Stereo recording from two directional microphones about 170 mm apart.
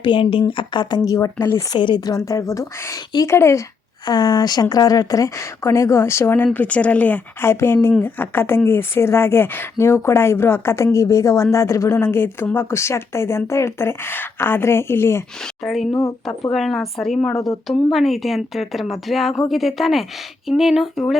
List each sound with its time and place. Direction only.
0.0 s a woman's voice: 30° left (ahead or behind); by 1.6 s 15° left (ahead or behind)
1.7 s a woman's voice: 25° left (ahead or behind)
15.6 s a woman's voice: centre (ahead or behind)